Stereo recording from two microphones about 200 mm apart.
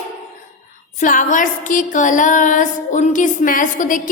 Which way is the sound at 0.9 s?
40° left (ahead or behind).